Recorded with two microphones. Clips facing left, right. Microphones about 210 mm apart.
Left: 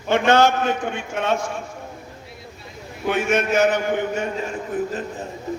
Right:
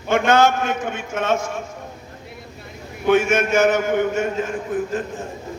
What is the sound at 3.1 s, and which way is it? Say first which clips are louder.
A man's voice: right 4 dB; 45° right (ahead or behind).